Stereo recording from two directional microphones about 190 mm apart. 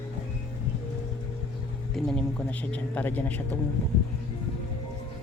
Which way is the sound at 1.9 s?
5° left (ahead or behind).